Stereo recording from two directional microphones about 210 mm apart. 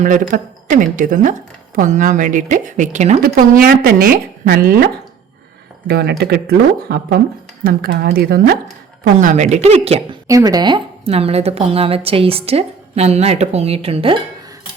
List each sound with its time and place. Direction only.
0.0 s a woman's voice: 40° right (ahead or behind)
5.9 s speech: 50° right (ahead or behind)
9.1 s a woman's voice: 35° right (ahead or behind)
10.2 s speech: 15° right (ahead or behind)